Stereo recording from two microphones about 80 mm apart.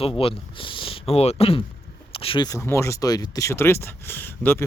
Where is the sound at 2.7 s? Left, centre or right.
Left.